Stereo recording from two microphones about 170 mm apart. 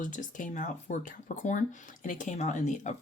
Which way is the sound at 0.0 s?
50° left (ahead or behind).